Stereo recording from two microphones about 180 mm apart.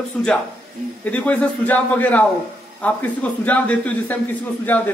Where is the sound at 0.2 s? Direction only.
5° left (ahead or behind).